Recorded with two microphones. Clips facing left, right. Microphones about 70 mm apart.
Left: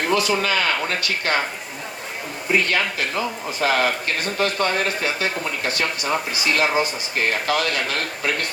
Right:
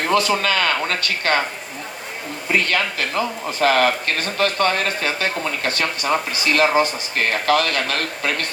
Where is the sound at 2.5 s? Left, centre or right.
Right.